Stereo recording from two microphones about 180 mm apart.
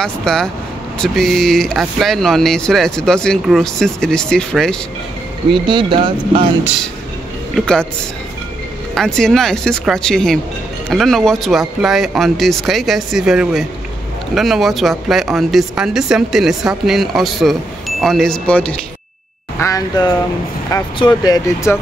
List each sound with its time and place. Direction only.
0.0 s speech: 5° left (ahead or behind)
5.5 s speech: 25° right (ahead or behind)
7.5 s speech: 5° left (ahead or behind)
8.9 s speech: 5° left (ahead or behind)
19.6 s speech: 20° left (ahead or behind)